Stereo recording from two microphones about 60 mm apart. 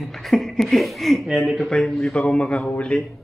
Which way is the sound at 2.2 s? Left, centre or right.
Centre.